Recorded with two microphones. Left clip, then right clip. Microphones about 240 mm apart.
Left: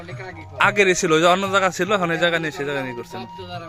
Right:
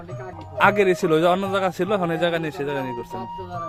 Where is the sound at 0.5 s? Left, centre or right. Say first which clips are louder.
Left 1 dB; centre.